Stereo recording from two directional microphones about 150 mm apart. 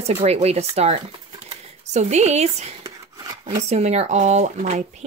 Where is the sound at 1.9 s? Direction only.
50° right (ahead or behind).